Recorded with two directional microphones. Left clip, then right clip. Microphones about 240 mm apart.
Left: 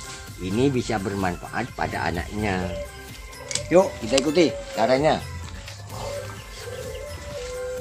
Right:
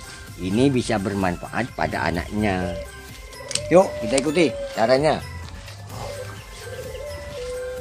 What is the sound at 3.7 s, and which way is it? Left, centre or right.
Speech, right.